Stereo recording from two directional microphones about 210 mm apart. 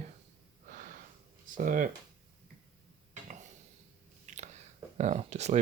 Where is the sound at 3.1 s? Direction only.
35° right (ahead or behind).